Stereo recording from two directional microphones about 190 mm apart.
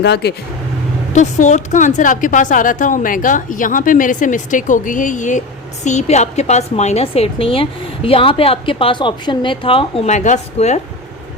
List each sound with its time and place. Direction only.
0.0 s speech: 60° left (ahead or behind)
1.1 s a woman's voice: 40° left (ahead or behind)